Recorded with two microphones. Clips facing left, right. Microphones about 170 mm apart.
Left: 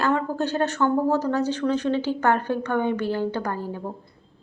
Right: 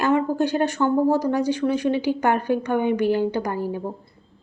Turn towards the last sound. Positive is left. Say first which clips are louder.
# right 3 dB
turn(degrees=-15)  # may be behind; listen again after turning